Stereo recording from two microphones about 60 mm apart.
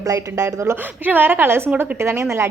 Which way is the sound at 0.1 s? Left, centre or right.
Right.